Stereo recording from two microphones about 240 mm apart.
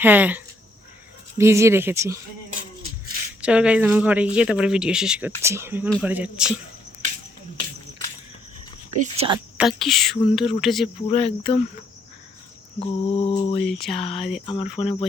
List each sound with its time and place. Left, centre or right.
0.0 s speech: centre
3.4 s speech: centre
9.0 s speech: right
9.6 s speech: centre
11.1 s mantra: left
12.8 s mantra: left
13.7 s speech: centre
14.4 s mantra: left